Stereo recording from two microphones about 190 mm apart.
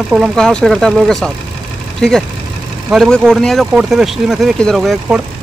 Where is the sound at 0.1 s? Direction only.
Centre (ahead or behind).